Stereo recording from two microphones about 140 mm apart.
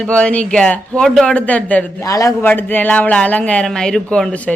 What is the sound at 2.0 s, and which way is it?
A man's voice, 25° left (ahead or behind).